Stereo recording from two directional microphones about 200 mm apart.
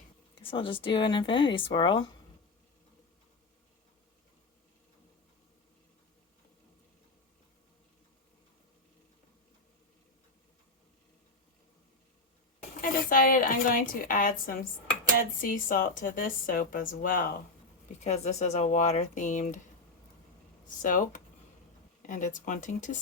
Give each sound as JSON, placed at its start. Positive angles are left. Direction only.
{"t": 0.4, "sound": "speech", "side_deg": 25}
{"t": 12.8, "sound": "a sound", "side_deg": 45}
{"t": 15.2, "sound": "a woman's voice", "side_deg": 45}
{"t": 18.0, "sound": "speech", "side_deg": 35}
{"t": 20.8, "sound": "speech", "side_deg": 40}